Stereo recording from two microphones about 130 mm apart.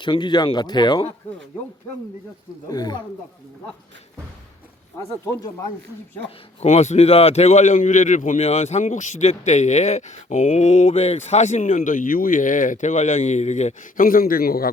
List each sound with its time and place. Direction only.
0.0 s speech: 35° left (ahead or behind)
2.6 s speech: 30° left (ahead or behind)
4.9 s speech: 25° left (ahead or behind)
6.6 s speech: 60° left (ahead or behind)
8.4 s speech: 55° left (ahead or behind); by 14.3 s 90° left